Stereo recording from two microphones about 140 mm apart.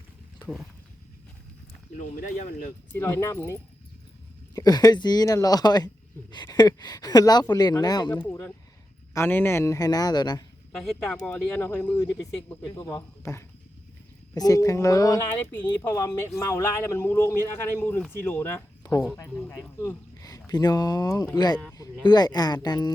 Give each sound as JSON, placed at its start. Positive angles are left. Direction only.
{"t": 0.4, "sound": "speech", "side_deg": 5}
{"t": 2.0, "sound": "speech", "side_deg": 65}
{"t": 3.0, "sound": "speech", "side_deg": 15}
{"t": 8.2, "sound": "speech", "side_deg": 15}
{"t": 10.8, "sound": "speech", "side_deg": 5}
{"t": 19.1, "sound": "speech", "side_deg": 20}